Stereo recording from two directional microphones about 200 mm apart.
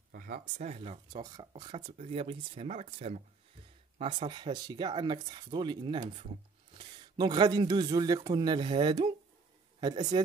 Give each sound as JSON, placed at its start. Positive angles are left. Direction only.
{"t": 0.1, "sound": "speech", "side_deg": -45}